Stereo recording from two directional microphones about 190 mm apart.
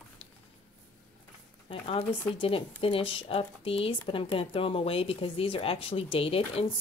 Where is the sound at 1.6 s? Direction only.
30° left (ahead or behind).